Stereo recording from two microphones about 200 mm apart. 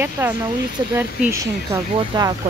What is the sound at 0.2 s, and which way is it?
Speech, 15° right (ahead or behind).